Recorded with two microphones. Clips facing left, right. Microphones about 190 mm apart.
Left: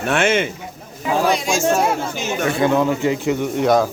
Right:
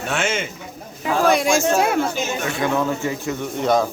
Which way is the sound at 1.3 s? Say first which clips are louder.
Right 1 dB; 55° right (ahead or behind).